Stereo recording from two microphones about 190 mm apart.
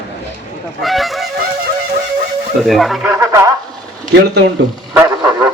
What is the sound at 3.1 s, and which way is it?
Speech, 15° right (ahead or behind).